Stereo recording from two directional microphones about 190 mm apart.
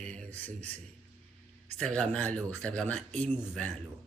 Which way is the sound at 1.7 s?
5° left (ahead or behind).